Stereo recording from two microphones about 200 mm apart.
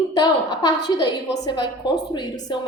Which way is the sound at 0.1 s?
20° left (ahead or behind).